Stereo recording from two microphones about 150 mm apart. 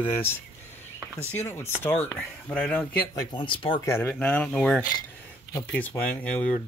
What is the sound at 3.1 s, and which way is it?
Speech, 35° left (ahead or behind).